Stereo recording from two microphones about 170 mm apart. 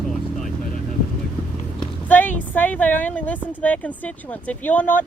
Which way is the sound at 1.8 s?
10° left (ahead or behind).